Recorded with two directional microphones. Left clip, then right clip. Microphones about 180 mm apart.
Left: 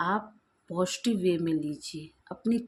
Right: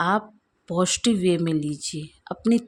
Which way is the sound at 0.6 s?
50° right (ahead or behind).